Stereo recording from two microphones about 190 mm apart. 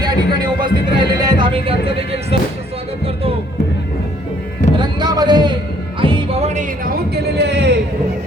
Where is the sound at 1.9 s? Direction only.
30° right (ahead or behind).